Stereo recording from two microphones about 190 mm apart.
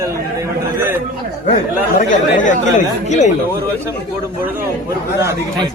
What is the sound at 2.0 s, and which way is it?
Speech, 40° left (ahead or behind).